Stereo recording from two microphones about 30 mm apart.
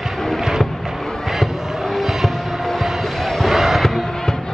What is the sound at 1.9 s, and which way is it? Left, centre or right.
Music, centre.